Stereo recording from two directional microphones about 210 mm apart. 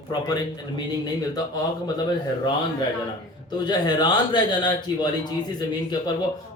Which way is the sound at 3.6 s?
20° left (ahead or behind).